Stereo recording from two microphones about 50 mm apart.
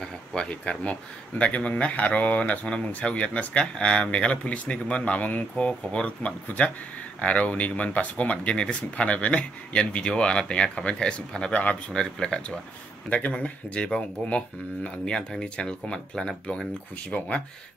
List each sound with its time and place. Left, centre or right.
0.0 s speech: centre